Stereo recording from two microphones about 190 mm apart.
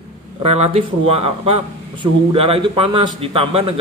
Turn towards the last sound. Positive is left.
turn(degrees=-30)  # may be behind; listen again after turning